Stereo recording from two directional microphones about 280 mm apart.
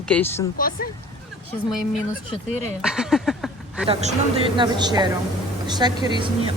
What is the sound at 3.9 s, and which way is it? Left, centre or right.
Speech, right.